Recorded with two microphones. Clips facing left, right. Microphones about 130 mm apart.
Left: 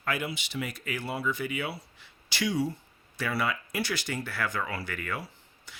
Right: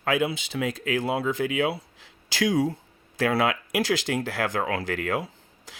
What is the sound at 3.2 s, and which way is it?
Speech, 90° right.